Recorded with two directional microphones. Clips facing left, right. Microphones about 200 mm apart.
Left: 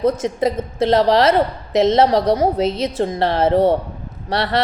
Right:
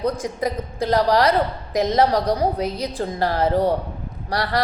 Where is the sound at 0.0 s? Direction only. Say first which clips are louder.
Left 5 dB; 25° left (ahead or behind).